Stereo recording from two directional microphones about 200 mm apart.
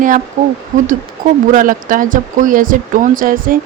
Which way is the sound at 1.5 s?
40° right (ahead or behind).